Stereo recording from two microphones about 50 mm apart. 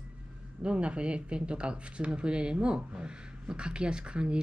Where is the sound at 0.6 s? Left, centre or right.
Right.